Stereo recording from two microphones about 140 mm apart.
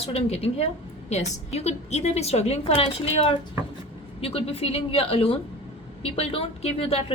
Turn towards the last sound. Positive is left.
turn(degrees=45)  # may be behind; listen again after turning